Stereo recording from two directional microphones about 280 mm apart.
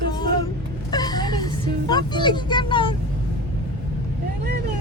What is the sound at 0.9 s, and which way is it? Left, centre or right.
Vehicle, centre.